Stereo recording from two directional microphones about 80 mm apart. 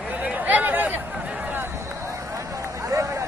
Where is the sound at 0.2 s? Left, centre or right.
Centre.